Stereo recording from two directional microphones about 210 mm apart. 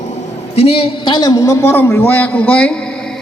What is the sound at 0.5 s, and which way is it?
A man's voice, 30° left (ahead or behind).